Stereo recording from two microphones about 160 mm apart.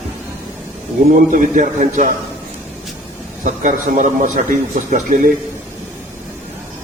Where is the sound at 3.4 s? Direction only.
55° right (ahead or behind).